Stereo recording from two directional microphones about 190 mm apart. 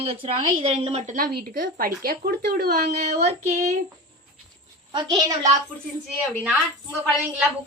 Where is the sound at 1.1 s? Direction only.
45° right (ahead or behind).